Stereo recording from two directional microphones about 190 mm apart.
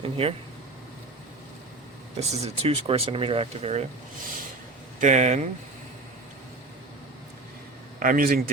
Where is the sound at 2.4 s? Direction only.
30° right (ahead or behind).